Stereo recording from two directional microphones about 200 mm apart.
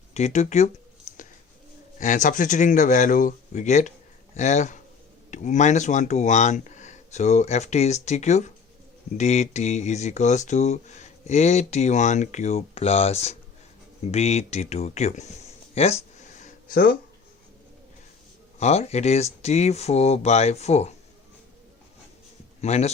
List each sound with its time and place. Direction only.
0.1 s speech: 35° left (ahead or behind)
2.0 s speech: 40° left (ahead or behind)
16.4 s a sound: 45° left (ahead or behind)
18.6 s speech: 35° left (ahead or behind)
22.6 s speech: 35° left (ahead or behind)